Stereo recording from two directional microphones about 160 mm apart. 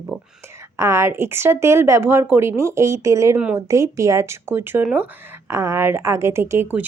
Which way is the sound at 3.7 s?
20° right (ahead or behind).